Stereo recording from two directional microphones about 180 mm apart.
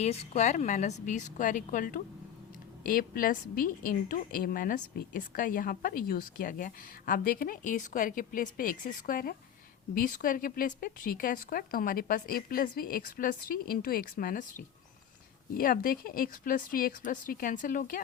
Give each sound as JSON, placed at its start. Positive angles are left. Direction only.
{"t": 0.0, "sound": "a woman's voice", "side_deg": 35}